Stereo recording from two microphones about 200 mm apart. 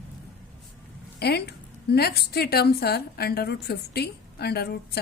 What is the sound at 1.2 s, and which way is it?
A woman's voice, 55° left (ahead or behind).